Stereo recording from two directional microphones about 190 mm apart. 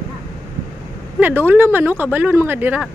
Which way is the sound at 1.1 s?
10° right (ahead or behind).